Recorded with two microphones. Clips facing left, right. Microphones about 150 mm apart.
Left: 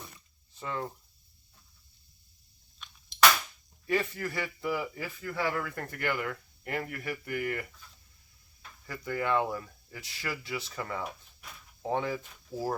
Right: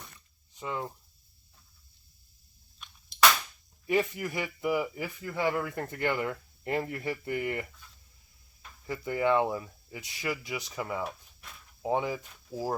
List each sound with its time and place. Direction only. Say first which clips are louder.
0.5 s speech: right 1 dB; 15° right (ahead or behind)
2.7 s a sound: even; centre (ahead or behind)
3.8 s speech: right 2 dB; 15° right (ahead or behind)
8.9 s speech: right 3 dB; 20° right (ahead or behind)